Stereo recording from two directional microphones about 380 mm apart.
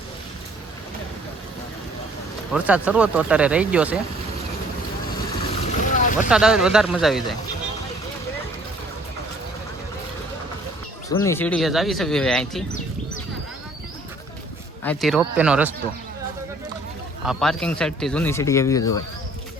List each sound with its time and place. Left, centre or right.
2.5 s speech: centre
5.7 s vehicle: centre
6.2 s speech: centre
11.1 s speech: centre
14.8 s speech: centre
17.2 s speech: centre